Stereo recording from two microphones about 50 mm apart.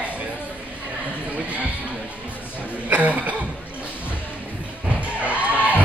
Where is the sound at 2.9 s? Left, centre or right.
Right.